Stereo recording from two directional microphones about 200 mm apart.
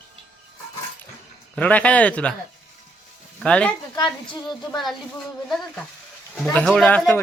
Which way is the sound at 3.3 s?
5° left (ahead or behind).